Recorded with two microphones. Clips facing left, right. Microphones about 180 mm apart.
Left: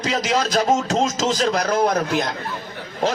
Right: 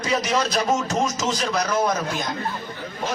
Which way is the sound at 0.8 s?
90° left.